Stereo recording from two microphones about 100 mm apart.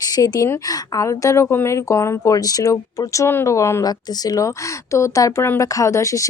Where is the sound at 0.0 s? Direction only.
35° left (ahead or behind).